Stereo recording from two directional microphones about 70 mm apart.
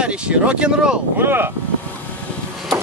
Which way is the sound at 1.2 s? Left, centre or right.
Right.